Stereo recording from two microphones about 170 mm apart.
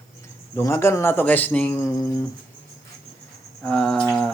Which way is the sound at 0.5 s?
15° left (ahead or behind).